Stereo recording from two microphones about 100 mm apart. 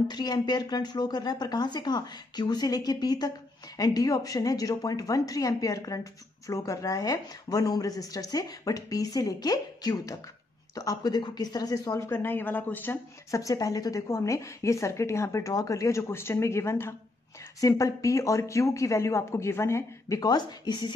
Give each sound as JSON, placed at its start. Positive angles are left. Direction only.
{"t": 0.1, "sound": "a woman's voice", "side_deg": 45}
{"t": 12.1, "sound": "a woman's voice", "side_deg": 20}
{"t": 13.3, "sound": "a woman's voice", "side_deg": 35}
{"t": 20.2, "sound": "speech", "side_deg": 45}